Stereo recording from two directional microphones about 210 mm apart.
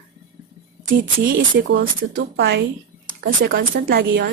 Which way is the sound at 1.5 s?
60° right (ahead or behind).